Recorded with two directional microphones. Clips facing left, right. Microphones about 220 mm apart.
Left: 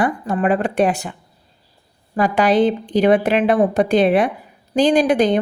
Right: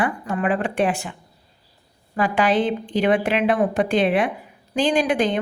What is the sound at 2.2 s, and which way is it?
A woman's voice, 40° left (ahead or behind).